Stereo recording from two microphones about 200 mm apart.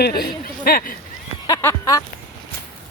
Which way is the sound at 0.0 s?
50° left (ahead or behind).